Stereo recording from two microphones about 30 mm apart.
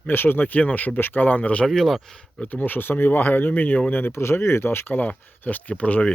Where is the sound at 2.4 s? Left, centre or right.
Left.